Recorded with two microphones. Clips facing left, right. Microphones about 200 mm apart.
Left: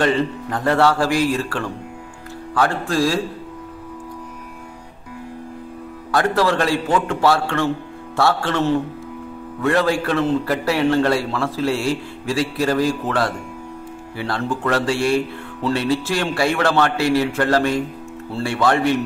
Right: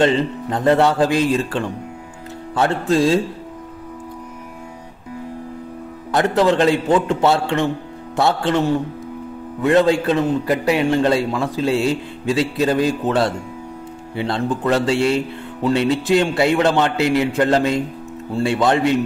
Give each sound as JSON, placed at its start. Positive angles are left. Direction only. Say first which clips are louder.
{"t": 0.0, "sound": "a man's voice", "louder": "right 2 dB", "side_deg": -20}
{"t": 6.1, "sound": "a man's voice", "louder": "right 2 dB", "side_deg": -20}